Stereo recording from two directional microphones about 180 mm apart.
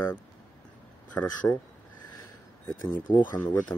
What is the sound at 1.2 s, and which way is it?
Speech, 15° left (ahead or behind).